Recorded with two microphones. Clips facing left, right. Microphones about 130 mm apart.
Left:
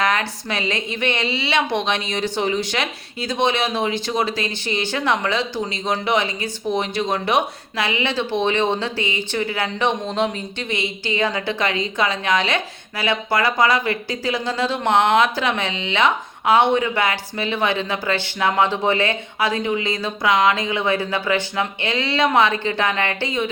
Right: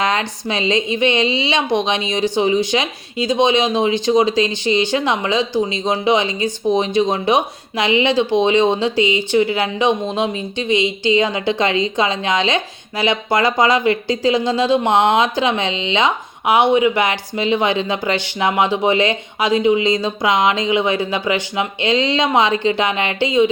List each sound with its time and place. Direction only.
0.0 s speech: 20° right (ahead or behind)